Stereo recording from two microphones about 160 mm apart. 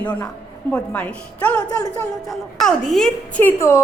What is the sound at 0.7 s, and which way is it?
Speech, 10° left (ahead or behind).